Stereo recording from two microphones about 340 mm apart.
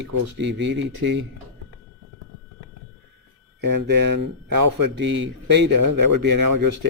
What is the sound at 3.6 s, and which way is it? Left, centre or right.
Speech, right.